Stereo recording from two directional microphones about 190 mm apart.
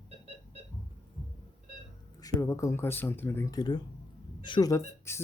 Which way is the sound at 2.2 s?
15° left (ahead or behind).